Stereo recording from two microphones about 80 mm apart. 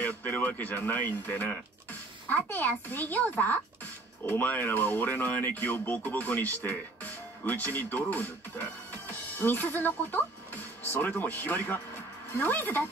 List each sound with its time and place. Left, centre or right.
0.0 s speech: left